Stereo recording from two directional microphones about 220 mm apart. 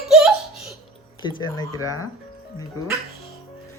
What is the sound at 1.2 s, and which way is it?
Speech, 20° left (ahead or behind).